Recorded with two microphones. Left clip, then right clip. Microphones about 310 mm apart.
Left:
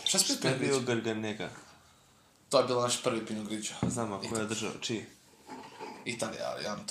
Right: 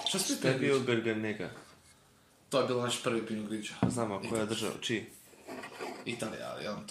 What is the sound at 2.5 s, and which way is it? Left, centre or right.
Speech, centre.